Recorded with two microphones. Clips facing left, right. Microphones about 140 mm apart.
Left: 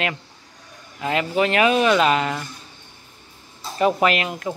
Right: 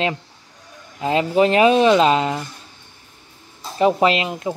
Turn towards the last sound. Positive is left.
turn(degrees=-20)  # may be behind; listen again after turning